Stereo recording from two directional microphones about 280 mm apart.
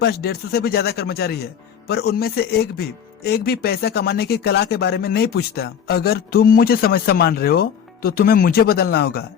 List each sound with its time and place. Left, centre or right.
0.0 s speech: left